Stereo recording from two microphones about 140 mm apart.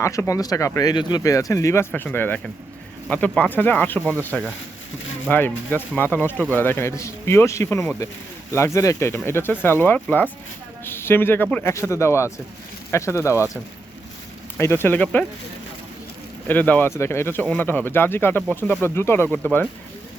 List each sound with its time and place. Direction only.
0.0 s speech: 20° left (ahead or behind)
14.6 s speech: 15° left (ahead or behind)
16.5 s speech: 10° left (ahead or behind)